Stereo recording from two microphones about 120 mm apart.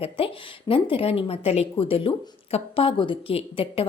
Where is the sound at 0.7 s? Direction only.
50° left (ahead or behind).